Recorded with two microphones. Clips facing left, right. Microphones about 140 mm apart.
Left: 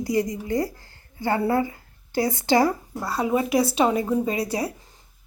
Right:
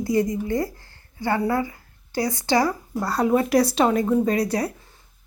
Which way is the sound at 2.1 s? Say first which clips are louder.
Left 1 dB; 40° right (ahead or behind).